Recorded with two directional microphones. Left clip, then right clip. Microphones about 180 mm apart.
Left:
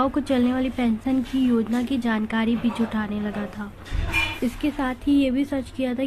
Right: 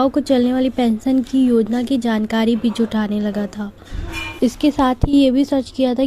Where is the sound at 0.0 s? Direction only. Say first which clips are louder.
Right 6 dB; 35° right (ahead or behind).